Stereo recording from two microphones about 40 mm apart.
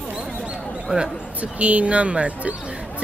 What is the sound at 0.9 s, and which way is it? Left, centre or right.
Speech, right.